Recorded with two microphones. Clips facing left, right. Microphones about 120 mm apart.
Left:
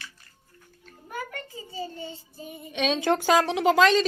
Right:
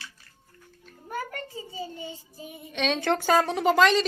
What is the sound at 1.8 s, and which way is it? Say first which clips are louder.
Child singing: left 3 dB; 15° right (ahead or behind).